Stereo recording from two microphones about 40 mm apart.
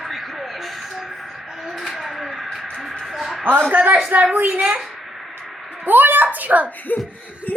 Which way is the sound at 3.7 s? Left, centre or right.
Right.